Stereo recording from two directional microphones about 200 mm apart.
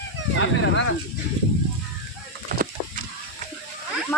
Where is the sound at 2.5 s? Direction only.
45° right (ahead or behind).